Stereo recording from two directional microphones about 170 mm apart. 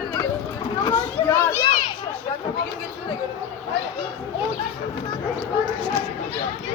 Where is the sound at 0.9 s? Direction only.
15° left (ahead or behind).